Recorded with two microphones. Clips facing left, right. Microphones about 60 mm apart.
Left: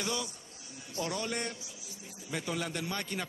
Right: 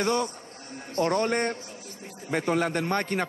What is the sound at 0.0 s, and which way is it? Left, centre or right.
Speech, right.